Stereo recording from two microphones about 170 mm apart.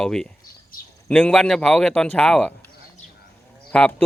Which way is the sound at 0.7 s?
60° left (ahead or behind).